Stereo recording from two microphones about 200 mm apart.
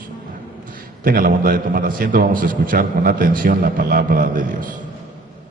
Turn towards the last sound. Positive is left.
turn(degrees=-45)  # may be behind; listen again after turning